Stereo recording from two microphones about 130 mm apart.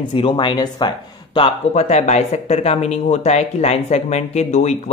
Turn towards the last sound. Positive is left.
turn(degrees=60)  # may be behind; listen again after turning